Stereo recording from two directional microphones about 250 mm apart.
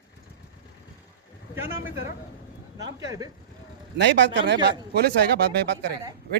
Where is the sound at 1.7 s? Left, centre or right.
Left.